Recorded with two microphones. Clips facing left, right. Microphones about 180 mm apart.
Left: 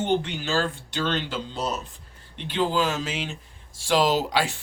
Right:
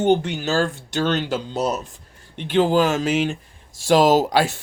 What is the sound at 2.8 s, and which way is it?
Speech, 50° right (ahead or behind).